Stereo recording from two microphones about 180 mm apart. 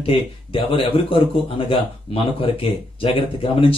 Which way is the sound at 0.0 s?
30° left (ahead or behind).